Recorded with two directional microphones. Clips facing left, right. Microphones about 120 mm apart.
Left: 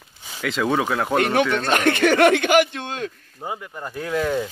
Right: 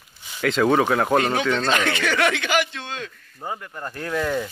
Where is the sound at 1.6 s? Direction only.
50° left (ahead or behind).